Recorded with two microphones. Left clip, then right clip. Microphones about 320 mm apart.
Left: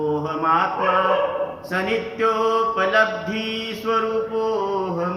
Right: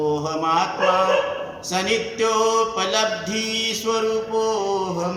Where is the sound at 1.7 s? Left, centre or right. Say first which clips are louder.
Right 3 dB; centre.